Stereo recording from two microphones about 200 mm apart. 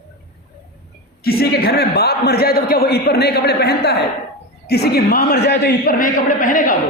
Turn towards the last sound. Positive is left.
turn(degrees=40)  # may be behind; listen again after turning